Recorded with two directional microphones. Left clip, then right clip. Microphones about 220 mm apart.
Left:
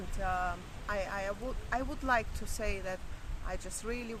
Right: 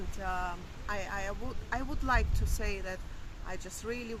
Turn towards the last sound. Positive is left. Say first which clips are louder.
# right 1 dB
turn(degrees=5)  # may be behind; listen again after turning